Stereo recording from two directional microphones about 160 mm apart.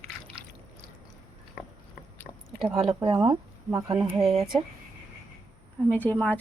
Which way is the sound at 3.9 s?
35° right (ahead or behind).